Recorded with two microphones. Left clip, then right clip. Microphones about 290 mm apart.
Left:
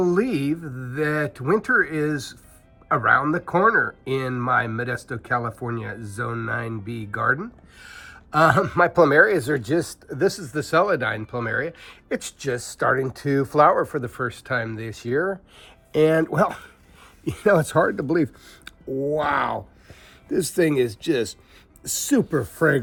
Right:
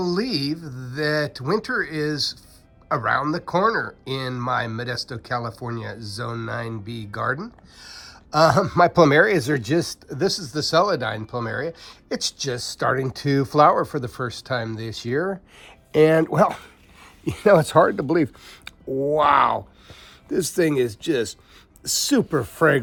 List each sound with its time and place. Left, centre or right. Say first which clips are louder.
0.0 s speech: left 3 dB; centre
15.2 s speech: left 1 dB; right
18.0 s speech: right 1 dB; centre